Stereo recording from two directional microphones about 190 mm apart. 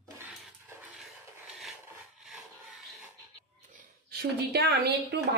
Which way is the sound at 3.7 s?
55° right (ahead or behind).